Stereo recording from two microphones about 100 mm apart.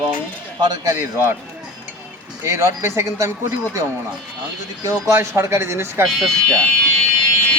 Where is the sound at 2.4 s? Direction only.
25° right (ahead or behind).